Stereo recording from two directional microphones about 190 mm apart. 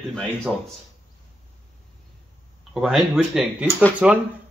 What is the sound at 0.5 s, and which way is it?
Speech, centre (ahead or behind).